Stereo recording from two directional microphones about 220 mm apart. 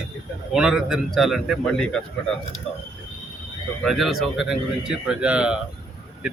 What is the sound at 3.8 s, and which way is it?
Speech, centre (ahead or behind).